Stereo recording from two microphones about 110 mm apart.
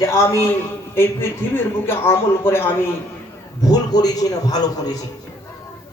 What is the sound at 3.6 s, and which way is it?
A man's voice, 35° left (ahead or behind).